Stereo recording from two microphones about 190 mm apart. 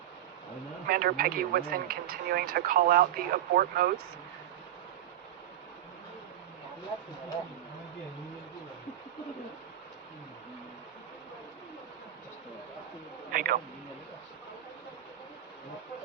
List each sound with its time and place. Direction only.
0.9 s speech: 50° right (ahead or behind)
13.3 s speech: 50° right (ahead or behind)